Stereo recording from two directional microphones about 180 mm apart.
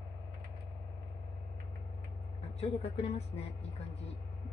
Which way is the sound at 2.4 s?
35° left (ahead or behind).